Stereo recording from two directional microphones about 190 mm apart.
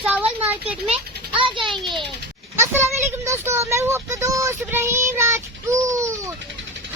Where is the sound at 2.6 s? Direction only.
15° right (ahead or behind).